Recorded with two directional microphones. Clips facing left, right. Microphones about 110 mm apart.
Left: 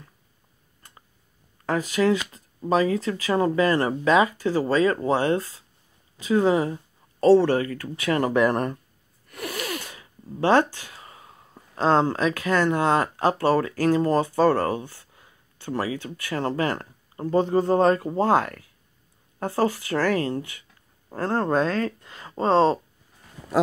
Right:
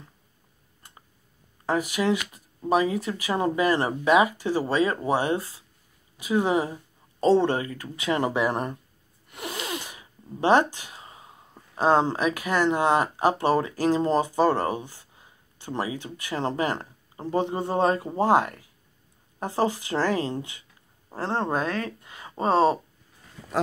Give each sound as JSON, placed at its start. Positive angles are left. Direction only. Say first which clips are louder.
{"t": 1.7, "sound": "speech", "louder": "left 2 dB", "side_deg": -15}
{"t": 9.3, "sound": "a sound", "louder": "left 2 dB", "side_deg": -20}
{"t": 11.7, "sound": "speech", "louder": "left 1 dB", "side_deg": -15}